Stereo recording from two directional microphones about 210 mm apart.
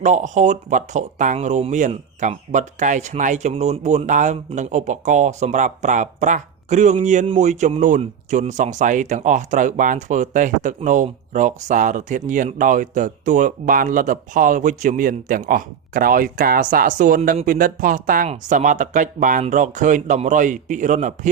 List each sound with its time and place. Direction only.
0.0 s speech: 35° right (ahead or behind)